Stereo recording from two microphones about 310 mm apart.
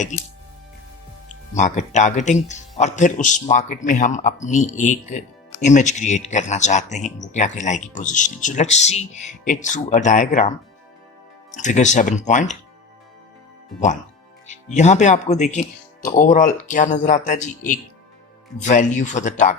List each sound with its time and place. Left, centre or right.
0.0 s speech: left
1.3 s speech: left
11.5 s speech: left
14.4 s speech: left